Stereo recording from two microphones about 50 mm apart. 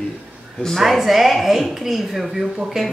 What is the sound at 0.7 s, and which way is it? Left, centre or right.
A woman's voice, centre.